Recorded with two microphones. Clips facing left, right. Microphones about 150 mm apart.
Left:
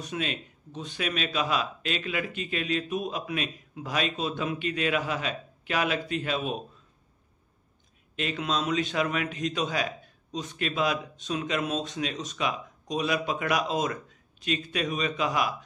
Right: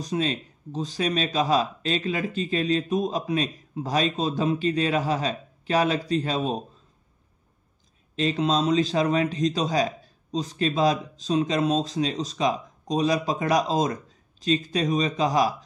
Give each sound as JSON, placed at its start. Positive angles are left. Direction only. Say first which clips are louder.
{"t": 0.0, "sound": "speech", "louder": "right 6 dB", "side_deg": -35}
{"t": 8.2, "sound": "speech", "louder": "right 6 dB", "side_deg": -30}